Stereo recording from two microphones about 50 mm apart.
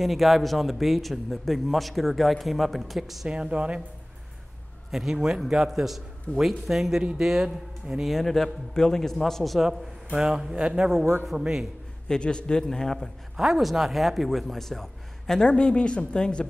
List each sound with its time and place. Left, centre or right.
0.0 s speech: centre
3.3 s speech: centre
4.9 s a man's voice: centre
7.0 s a man's voice: centre
7.2 s a man's voice: centre
8.1 s a man's voice: centre
10.1 s a man's voice: centre
12.1 s a man's voice: centre
13.4 s speech: centre
15.4 s speech: centre